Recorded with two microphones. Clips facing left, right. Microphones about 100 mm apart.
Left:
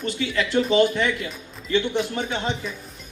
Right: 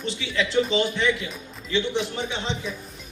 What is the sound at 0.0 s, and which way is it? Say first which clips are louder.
A man's voice: left 2 dB; 45° left (ahead or behind).